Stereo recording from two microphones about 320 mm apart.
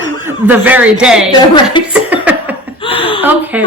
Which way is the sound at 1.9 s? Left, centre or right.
Centre.